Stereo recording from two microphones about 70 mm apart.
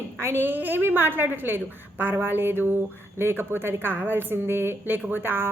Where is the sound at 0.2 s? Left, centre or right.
Right.